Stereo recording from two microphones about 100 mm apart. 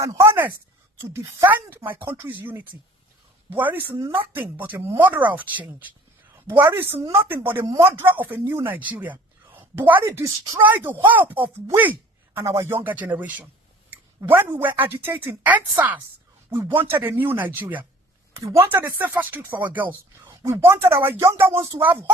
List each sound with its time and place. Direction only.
0.0 s a woman's voice: 30° right (ahead or behind)
10.0 s speech: 30° right (ahead or behind)
10.6 s a woman's voice: 20° right (ahead or behind)
11.8 s a sound: 15° right (ahead or behind)
12.5 s speech: 30° right (ahead or behind)
12.8 s a woman's voice: 20° right (ahead or behind)
18.3 s speech: 30° right (ahead or behind)
18.9 s speech: 20° right (ahead or behind)
20.2 s a woman's voice: 30° right (ahead or behind)